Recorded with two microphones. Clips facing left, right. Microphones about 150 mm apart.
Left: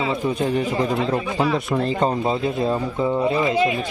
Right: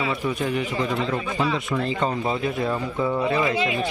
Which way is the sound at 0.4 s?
40° left (ahead or behind).